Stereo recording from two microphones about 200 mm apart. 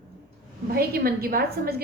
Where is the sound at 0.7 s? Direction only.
50° right (ahead or behind).